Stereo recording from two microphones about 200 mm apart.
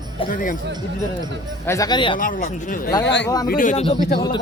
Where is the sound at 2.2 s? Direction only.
40° left (ahead or behind).